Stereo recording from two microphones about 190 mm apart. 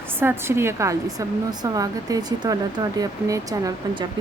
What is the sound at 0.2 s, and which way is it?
Speech, 10° right (ahead or behind).